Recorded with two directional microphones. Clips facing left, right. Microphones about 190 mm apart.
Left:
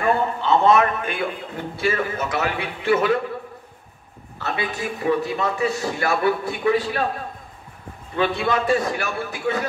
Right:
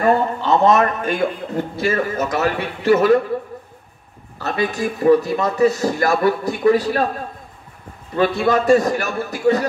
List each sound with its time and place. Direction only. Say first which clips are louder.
0.0 s a man's voice: right 4 dB; 40° right (ahead or behind)
4.4 s a man's voice: right 6 dB; 40° right (ahead or behind)
8.2 s a man's voice: right 5 dB; 40° right (ahead or behind)